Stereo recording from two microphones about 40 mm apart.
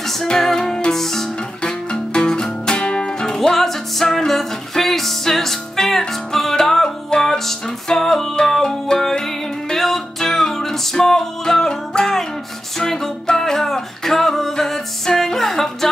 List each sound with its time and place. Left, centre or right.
0.0 s music: centre
1.6 s music: left